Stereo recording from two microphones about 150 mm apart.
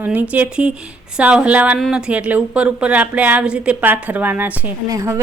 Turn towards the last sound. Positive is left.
turn(degrees=-20)  # may be behind; listen again after turning